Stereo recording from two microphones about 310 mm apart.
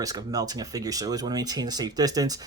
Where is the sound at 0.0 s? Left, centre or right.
Centre.